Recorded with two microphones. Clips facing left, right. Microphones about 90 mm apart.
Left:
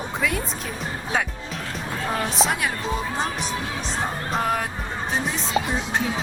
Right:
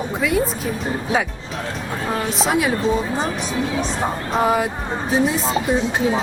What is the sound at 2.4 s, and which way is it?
Speech, centre (ahead or behind).